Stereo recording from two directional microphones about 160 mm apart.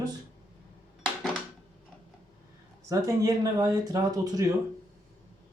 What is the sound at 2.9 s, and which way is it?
Speech, 20° right (ahead or behind).